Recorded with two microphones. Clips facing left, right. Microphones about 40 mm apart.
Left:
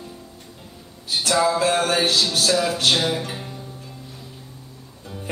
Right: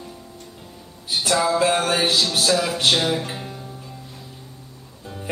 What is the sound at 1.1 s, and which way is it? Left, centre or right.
Music, centre.